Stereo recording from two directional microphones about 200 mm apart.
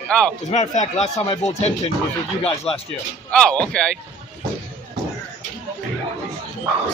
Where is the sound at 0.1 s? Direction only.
5° left (ahead or behind).